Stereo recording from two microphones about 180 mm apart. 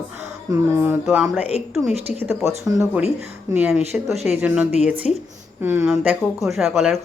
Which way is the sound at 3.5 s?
10° right (ahead or behind).